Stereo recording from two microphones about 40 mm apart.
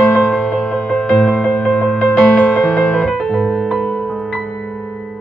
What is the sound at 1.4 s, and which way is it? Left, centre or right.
Music, centre.